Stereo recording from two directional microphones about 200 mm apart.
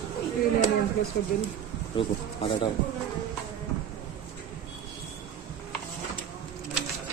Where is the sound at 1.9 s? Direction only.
25° left (ahead or behind).